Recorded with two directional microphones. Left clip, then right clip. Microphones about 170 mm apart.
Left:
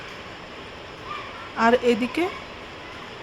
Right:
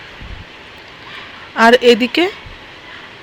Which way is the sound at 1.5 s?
25° right (ahead or behind).